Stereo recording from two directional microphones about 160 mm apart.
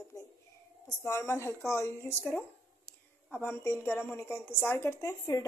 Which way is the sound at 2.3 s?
5° left (ahead or behind).